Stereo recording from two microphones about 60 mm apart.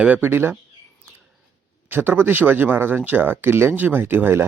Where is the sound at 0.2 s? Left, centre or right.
Right.